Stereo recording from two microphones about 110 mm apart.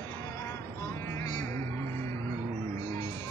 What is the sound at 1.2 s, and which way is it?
Music, 35° left (ahead or behind).